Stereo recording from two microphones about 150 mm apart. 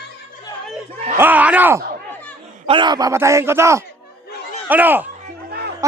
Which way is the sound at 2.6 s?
35° right (ahead or behind).